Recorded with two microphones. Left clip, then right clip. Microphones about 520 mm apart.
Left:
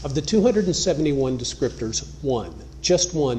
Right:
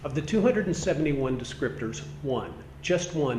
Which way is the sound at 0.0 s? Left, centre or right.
Left.